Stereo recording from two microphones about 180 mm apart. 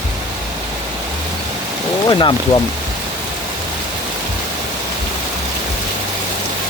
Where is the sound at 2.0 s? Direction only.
25° left (ahead or behind).